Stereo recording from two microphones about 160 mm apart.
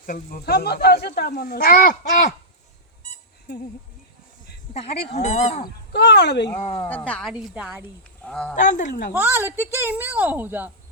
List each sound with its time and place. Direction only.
0.0 s speech: 65° left (ahead or behind)
3.5 s speech: 90° left
4.7 s speech: 40° left (ahead or behind)
5.9 s speech: 90° left
6.6 s speech: 40° left (ahead or behind)
6.8 s speech: 10° left (ahead or behind); by 7.9 s 10° right (ahead or behind)
8.2 s speech: 5° left (ahead or behind)
8.5 s speech: 55° left (ahead or behind)
9.1 s a woman's voice: 15° right (ahead or behind)